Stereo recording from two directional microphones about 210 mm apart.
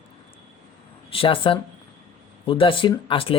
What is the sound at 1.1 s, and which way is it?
Speech, 25° left (ahead or behind).